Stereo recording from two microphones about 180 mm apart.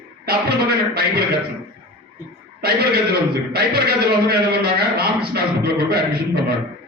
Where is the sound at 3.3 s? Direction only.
60° right (ahead or behind).